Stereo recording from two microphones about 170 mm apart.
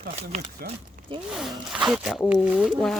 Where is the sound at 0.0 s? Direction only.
60° right (ahead or behind).